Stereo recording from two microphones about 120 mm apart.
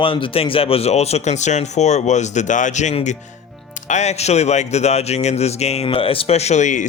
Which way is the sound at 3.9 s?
70° left (ahead or behind).